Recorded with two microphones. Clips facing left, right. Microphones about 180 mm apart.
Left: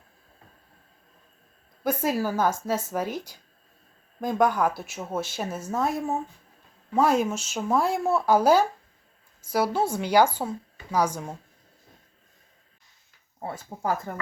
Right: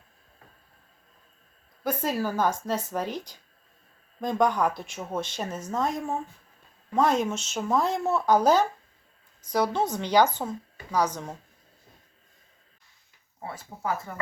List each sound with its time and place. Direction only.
1.8 s speech: 10° left (ahead or behind)
13.7 s speech: 25° left (ahead or behind)